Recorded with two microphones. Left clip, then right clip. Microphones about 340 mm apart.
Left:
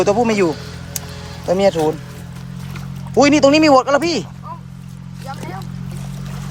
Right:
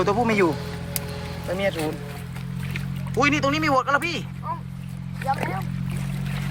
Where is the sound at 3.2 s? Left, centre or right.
Centre.